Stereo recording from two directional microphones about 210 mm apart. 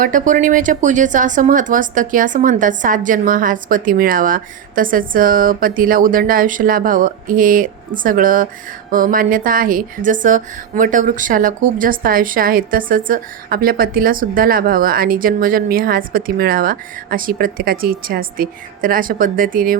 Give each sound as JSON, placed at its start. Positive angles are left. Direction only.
{"t": 0.0, "sound": "a woman's voice", "side_deg": -40}